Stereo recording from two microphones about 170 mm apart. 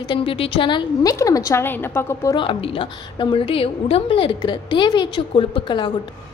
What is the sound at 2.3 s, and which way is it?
A woman's voice, 30° left (ahead or behind).